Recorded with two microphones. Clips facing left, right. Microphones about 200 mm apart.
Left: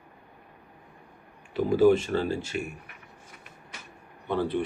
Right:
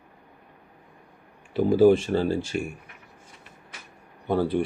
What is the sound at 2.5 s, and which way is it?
Speech, 45° right (ahead or behind).